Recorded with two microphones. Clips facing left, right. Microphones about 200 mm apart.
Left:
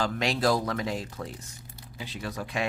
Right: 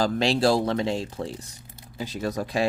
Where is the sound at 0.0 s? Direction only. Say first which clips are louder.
Right 5 dB; 30° right (ahead or behind).